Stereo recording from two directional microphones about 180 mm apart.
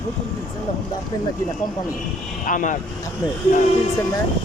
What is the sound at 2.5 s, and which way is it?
Speech, 45° left (ahead or behind).